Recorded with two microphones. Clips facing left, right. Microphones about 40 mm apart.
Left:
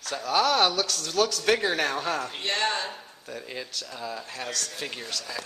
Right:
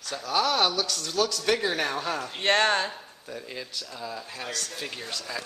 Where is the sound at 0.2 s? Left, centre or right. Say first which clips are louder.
Left 2 dB; centre.